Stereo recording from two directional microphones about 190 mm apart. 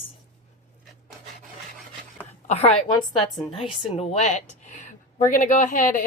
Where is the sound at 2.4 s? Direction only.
35° left (ahead or behind).